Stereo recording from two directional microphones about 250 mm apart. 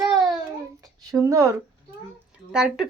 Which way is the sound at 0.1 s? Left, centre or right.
Centre.